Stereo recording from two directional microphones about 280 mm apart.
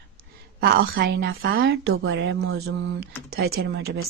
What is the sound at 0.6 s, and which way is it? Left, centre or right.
A woman's voice, right.